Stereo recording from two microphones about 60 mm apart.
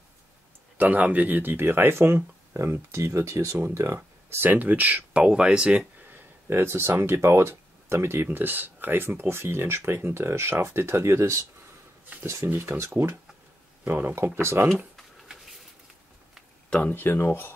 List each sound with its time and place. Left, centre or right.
0.7 s speech: right
2.5 s speech: right
4.5 s speech: right
6.1 s a sound: right
6.9 s speech: right
8.3 s speech: right
12.4 s speech: right
13.8 s speech: right
15.0 s a sound: centre
16.7 s speech: left